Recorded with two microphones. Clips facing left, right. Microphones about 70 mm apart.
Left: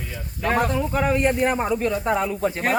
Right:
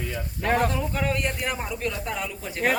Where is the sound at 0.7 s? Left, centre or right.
Centre.